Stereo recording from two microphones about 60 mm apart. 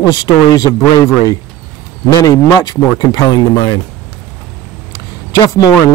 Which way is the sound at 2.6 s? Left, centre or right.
Left.